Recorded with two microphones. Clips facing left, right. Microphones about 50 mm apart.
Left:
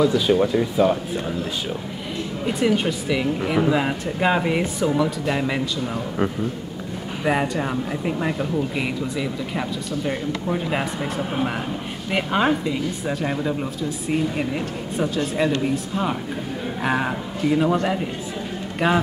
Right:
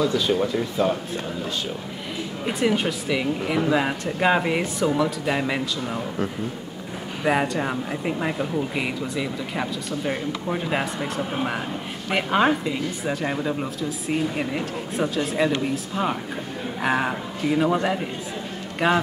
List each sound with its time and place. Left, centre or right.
0.0 s speech: centre
2.4 s speech: centre
7.2 s speech: centre
18.8 s speech: centre